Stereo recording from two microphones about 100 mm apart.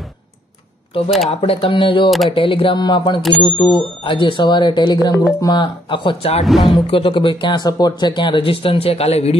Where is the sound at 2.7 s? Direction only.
50° left (ahead or behind).